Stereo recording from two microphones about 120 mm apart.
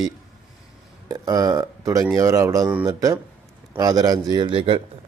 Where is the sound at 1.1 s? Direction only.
30° right (ahead or behind).